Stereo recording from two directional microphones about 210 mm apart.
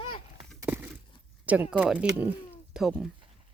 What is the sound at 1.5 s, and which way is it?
Speech, 5° right (ahead or behind).